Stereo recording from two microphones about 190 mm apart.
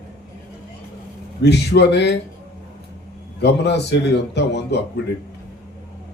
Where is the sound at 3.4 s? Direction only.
65° left (ahead or behind).